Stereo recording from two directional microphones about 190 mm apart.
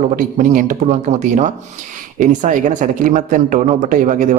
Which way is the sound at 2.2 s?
40° right (ahead or behind).